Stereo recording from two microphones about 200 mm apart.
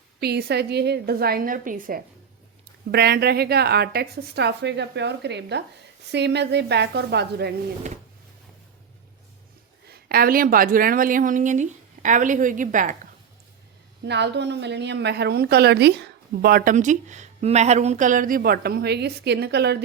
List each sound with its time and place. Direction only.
0.2 s a woman's voice: 50° right (ahead or behind)
9.9 s a woman's voice: 50° right (ahead or behind)
14.0 s a woman's voice: 60° right (ahead or behind)